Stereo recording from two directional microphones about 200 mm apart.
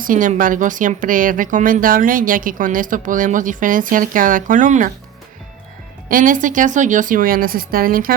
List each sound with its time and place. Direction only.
0.0 s speech: 40° right (ahead or behind)
6.1 s speech: 45° right (ahead or behind)